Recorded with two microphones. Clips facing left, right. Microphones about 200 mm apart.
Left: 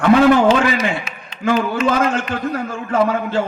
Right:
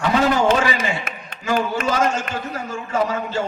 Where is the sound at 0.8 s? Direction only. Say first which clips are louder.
Left 4 dB; 55° right (ahead or behind).